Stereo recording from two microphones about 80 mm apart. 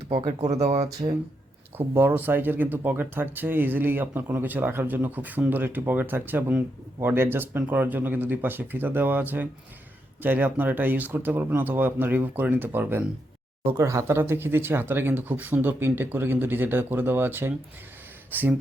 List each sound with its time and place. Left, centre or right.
0.2 s speech: right
1.0 s speech: right
1.8 s speech: right
13.7 s speech: right